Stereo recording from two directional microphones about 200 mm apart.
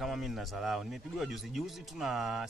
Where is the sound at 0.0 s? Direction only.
Centre (ahead or behind).